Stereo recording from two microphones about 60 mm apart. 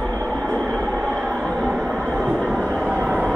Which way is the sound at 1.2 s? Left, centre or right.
Centre.